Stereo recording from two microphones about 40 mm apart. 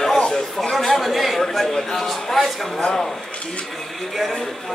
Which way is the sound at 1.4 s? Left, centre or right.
Centre.